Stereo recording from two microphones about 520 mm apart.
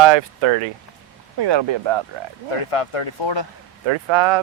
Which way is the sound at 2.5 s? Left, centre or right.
Left.